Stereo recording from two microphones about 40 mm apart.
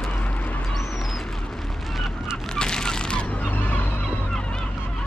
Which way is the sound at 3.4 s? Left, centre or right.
Left.